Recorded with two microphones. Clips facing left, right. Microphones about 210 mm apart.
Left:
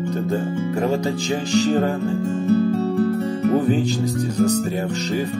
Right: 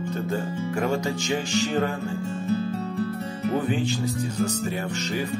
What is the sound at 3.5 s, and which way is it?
Music, 40° left (ahead or behind).